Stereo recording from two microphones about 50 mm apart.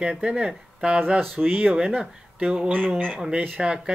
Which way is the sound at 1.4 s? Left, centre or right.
Right.